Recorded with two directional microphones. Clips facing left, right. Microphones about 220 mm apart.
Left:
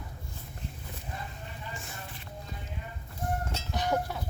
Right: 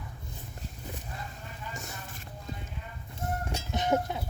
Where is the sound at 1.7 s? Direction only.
45° right (ahead or behind).